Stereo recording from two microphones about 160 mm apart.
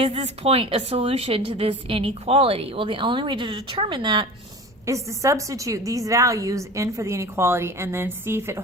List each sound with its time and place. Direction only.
0.0 s a woman's voice: 35° right (ahead or behind)
4.9 s a woman's voice: 20° right (ahead or behind)